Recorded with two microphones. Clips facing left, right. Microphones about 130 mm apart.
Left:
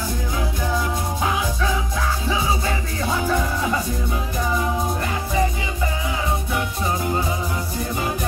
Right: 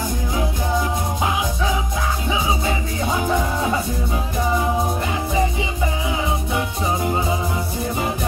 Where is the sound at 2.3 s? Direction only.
20° right (ahead or behind).